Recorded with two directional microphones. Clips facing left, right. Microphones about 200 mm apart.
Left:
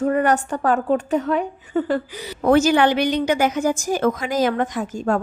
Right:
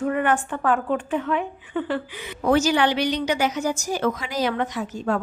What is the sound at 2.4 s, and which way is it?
A woman's voice, 55° left (ahead or behind).